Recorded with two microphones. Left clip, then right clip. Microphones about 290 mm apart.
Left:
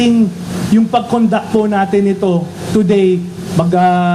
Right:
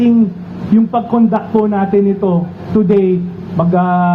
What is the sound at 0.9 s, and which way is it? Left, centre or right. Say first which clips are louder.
A man's voice: left 2 dB; left.